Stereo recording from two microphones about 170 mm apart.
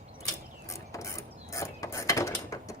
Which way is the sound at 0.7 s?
20° left (ahead or behind).